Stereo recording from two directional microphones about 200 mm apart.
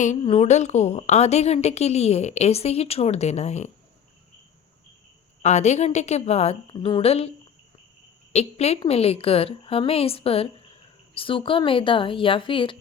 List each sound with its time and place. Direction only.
0.2 s a woman's voice: 30° left (ahead or behind)
5.4 s a woman's voice: 35° left (ahead or behind)
8.3 s a woman's voice: 30° left (ahead or behind)